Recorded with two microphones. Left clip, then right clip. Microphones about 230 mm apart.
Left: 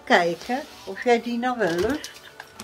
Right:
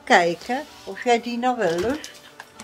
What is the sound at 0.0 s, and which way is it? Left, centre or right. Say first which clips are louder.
Speech: right 2 dB; right.